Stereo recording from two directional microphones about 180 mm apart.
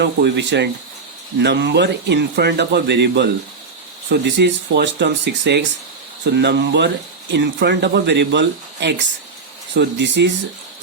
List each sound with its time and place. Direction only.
0.0 s speech: 75° right (ahead or behind)